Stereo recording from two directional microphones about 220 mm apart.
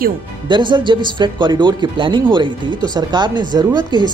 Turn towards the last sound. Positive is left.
turn(degrees=-20)  # may be behind; listen again after turning